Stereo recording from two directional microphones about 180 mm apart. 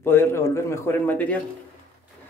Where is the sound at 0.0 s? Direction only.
15° left (ahead or behind).